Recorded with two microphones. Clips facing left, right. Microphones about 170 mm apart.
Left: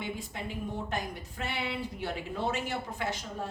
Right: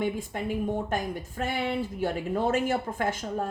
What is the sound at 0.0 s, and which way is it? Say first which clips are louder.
A woman's voice: right 8 dB; 50° right (ahead or behind).